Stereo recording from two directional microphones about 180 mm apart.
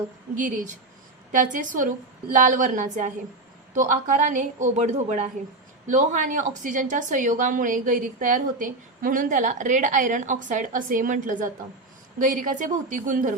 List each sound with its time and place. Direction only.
0.3 s a woman's voice: 45° right (ahead or behind)